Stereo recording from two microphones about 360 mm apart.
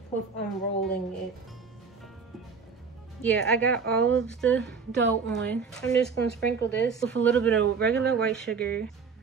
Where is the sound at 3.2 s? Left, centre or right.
Centre.